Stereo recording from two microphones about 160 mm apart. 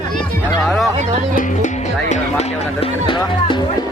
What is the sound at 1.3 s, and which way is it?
Music, 55° left (ahead or behind).